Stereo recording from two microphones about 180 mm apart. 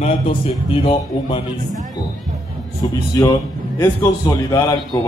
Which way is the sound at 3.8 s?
15° left (ahead or behind).